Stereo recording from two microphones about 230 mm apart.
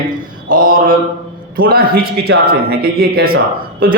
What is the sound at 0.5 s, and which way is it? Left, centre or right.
A man's voice, right.